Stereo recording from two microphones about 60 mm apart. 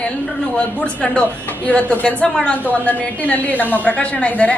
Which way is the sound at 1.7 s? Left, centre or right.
Left.